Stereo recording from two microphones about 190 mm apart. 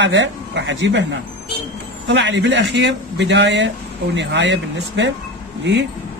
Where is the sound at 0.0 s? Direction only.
70° right (ahead or behind).